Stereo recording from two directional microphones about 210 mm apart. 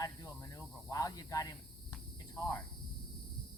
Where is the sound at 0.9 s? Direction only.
15° left (ahead or behind).